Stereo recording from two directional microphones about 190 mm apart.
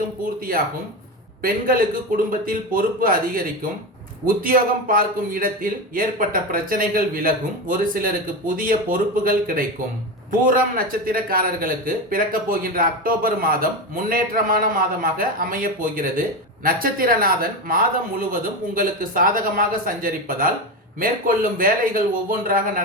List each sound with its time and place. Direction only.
1.4 s a man's voice: 50° right (ahead or behind)